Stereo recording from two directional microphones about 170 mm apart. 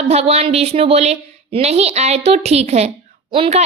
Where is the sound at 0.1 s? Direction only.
40° right (ahead or behind).